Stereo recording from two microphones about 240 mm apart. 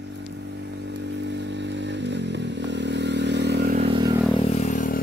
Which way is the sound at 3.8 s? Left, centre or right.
Right.